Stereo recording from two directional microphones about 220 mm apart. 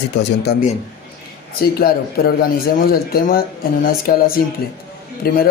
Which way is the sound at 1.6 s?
45° left (ahead or behind).